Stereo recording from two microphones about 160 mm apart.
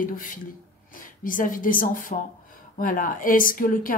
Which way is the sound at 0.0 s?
60° left (ahead or behind).